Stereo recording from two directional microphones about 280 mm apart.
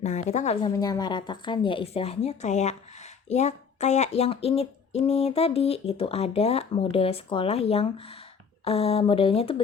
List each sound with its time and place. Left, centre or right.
0.0 s speech: left